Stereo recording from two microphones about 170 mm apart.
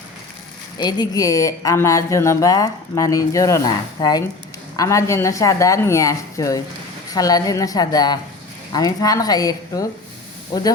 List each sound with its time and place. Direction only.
0.8 s a woman's voice: 25° left (ahead or behind)